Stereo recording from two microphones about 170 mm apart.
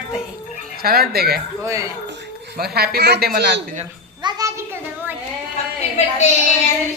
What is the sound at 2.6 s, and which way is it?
A woman's voice, 65° right (ahead or behind).